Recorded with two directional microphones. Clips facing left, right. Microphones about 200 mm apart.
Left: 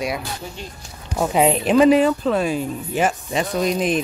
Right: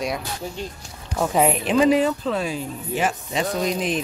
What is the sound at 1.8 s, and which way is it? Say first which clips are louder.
Speech: left 4 dB; 60° left (ahead or behind).